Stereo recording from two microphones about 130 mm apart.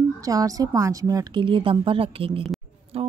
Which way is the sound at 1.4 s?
40° right (ahead or behind).